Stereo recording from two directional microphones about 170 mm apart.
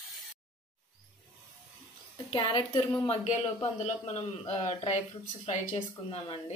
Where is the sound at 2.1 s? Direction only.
30° left (ahead or behind).